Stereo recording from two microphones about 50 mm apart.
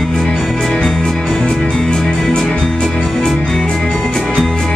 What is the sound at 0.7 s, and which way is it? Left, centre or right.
Music, centre.